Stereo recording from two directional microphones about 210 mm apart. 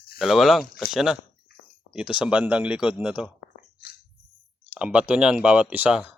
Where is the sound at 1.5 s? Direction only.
50° left (ahead or behind).